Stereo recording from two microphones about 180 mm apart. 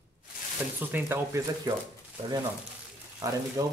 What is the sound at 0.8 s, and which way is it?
Speech, 10° right (ahead or behind).